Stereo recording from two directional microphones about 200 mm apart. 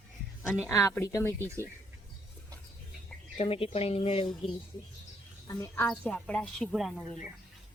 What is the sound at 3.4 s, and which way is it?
Speech, 30° left (ahead or behind).